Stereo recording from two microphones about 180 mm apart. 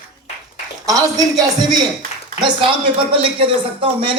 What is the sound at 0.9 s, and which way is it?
Speech, 20° right (ahead or behind).